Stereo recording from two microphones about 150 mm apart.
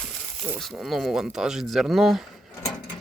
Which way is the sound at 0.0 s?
Centre (ahead or behind).